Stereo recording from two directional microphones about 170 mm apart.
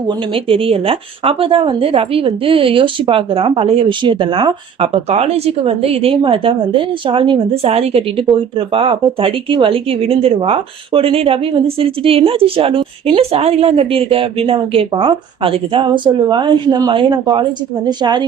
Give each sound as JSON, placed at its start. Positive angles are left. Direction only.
{"t": 0.1, "sound": "speech", "side_deg": -30}